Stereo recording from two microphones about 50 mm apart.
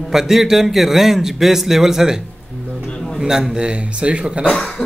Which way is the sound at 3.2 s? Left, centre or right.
Centre.